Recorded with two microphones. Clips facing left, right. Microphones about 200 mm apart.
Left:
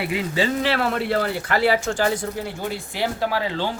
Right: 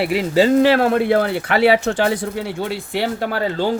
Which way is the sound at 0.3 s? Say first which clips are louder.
Right 10 dB; 45° right (ahead or behind).